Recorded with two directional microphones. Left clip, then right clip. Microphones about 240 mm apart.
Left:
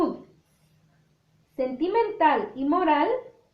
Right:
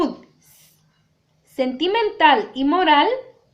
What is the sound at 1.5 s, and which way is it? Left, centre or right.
Speech, right.